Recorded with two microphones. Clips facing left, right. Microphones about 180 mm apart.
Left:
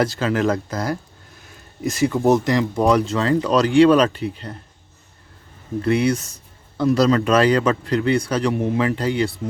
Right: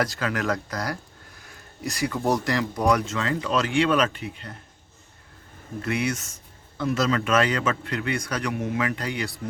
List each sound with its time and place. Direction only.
0.0 s speech: 25° left (ahead or behind)
5.8 s speech: 35° left (ahead or behind)